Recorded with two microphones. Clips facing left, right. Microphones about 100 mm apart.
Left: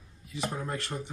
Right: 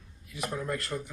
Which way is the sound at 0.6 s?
30° left (ahead or behind).